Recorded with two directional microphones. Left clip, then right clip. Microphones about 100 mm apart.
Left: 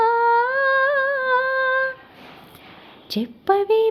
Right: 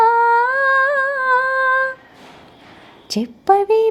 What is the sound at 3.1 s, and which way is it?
Speech, 25° right (ahead or behind).